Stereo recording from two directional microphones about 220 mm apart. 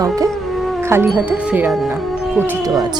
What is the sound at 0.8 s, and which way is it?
Speech, 10° right (ahead or behind).